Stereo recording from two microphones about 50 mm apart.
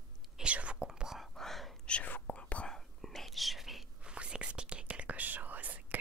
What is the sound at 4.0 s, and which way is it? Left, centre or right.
Whispering, centre.